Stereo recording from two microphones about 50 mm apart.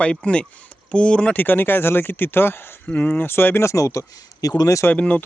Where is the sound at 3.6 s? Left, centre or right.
Left.